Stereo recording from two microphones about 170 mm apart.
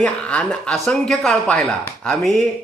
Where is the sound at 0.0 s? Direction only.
5° left (ahead or behind).